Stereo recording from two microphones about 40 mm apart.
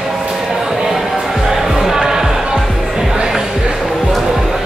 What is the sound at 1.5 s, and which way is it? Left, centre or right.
Music, centre.